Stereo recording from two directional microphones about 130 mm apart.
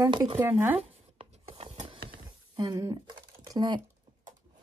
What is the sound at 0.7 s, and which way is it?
Writing, 50° right (ahead or behind).